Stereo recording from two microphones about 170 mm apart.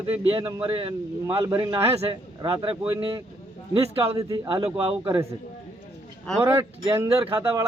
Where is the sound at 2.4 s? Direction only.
25° right (ahead or behind).